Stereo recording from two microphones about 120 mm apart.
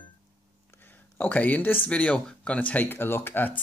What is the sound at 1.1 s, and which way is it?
Speech, 15° left (ahead or behind).